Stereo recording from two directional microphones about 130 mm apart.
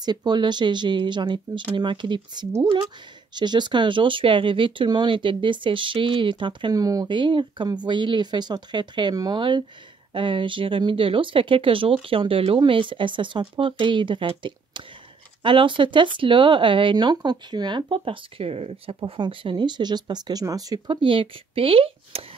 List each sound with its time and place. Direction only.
0.0 s speech: 35° right (ahead or behind); by 18.9 s 50° right (ahead or behind)
18.9 s speech: 40° right (ahead or behind)